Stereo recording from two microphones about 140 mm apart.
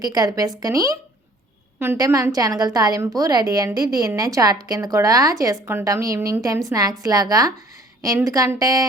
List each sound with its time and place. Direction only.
0.0 s a woman's voice: 25° right (ahead or behind)